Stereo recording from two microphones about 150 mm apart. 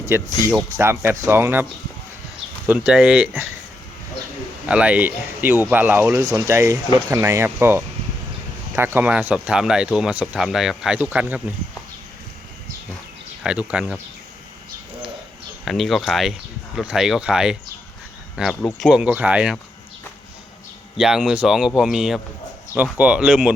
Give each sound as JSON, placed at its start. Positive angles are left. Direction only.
{"t": 0.1, "sound": "speech", "side_deg": -20}
{"t": 2.6, "sound": "speech", "side_deg": -5}
{"t": 4.7, "sound": "speech", "side_deg": -10}
{"t": 13.4, "sound": "speech", "side_deg": -5}
{"t": 15.6, "sound": "speech", "side_deg": 0}
{"t": 18.6, "sound": "speech", "side_deg": 0}
{"t": 20.9, "sound": "speech", "side_deg": -5}